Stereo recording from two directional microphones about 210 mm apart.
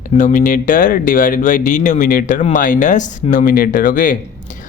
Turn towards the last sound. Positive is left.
turn(degrees=40)  # may be behind; listen again after turning